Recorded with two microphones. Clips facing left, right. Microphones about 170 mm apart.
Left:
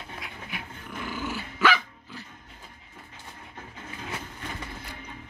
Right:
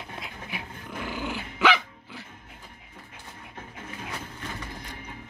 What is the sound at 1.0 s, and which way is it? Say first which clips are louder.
Dog: even; 15° right (ahead or behind).